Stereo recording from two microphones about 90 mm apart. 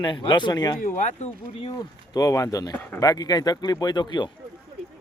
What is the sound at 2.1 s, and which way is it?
Speech, 40° left (ahead or behind).